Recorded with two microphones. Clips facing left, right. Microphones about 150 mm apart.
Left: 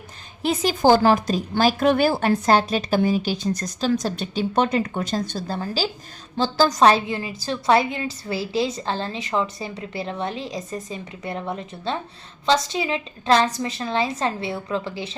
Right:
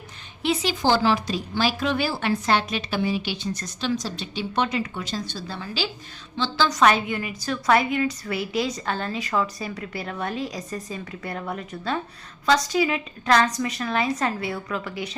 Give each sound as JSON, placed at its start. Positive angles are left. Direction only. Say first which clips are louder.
{"t": 0.4, "sound": "a woman's voice", "louder": "left 5 dB", "side_deg": 45}